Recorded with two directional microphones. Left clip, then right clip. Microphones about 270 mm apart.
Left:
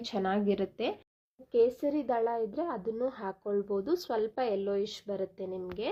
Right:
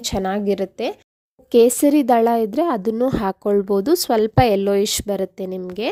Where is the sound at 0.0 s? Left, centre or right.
Right.